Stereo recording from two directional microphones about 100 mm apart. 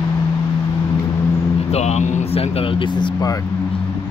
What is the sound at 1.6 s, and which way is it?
Speech, 90° left.